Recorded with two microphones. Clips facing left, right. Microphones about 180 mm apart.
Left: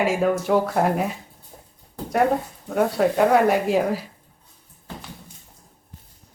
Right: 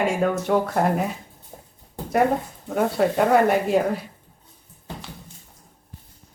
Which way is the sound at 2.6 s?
Centre (ahead or behind).